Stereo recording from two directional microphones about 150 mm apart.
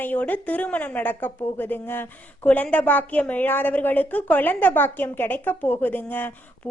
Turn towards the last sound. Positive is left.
turn(degrees=15)  # may be behind; listen again after turning